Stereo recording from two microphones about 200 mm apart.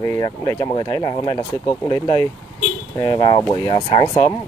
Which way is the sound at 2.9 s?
20° left (ahead or behind).